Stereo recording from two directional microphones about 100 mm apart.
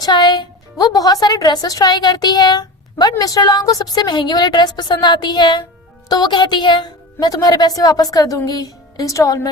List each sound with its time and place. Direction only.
0.0 s a woman's voice: 45° left (ahead or behind)